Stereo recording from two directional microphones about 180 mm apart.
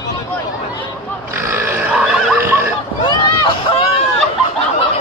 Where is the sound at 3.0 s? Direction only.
25° left (ahead or behind).